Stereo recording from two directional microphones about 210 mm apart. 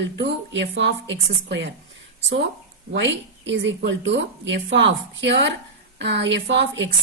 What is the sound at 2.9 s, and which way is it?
A woman's voice, 60° right (ahead or behind).